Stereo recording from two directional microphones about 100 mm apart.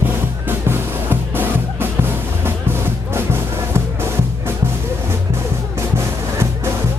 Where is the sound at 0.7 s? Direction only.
20° right (ahead or behind).